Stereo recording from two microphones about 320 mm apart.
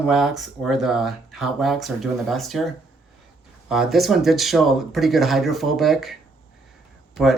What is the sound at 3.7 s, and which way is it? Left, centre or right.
Speech, centre.